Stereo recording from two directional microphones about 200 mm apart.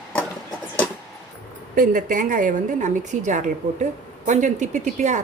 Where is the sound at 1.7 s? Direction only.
45° right (ahead or behind).